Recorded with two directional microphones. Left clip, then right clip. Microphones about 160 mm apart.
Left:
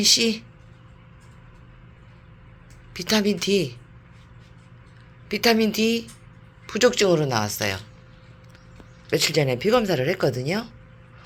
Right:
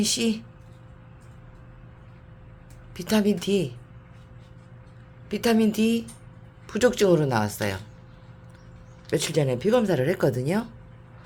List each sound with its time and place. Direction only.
0.0 s speech: 5° right (ahead or behind)
2.9 s speech: 10° right (ahead or behind)
5.3 s speech: 5° right (ahead or behind); by 7.8 s 20° right (ahead or behind)
9.0 s speech: 10° right (ahead or behind)